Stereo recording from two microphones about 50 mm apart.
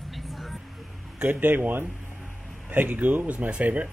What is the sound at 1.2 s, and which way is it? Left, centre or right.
Speech, right.